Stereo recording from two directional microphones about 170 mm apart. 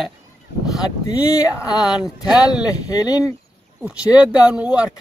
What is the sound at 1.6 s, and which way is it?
Speech, 5° right (ahead or behind).